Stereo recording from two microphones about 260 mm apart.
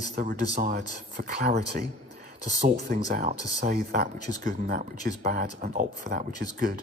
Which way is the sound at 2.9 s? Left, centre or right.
Right.